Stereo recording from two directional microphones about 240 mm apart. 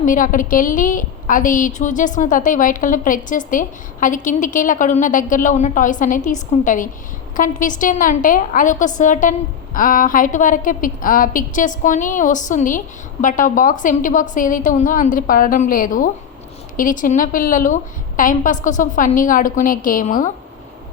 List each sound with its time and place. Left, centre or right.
0.0 s a woman's voice: left